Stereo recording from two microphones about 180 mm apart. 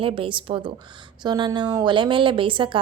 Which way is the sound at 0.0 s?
30° right (ahead or behind).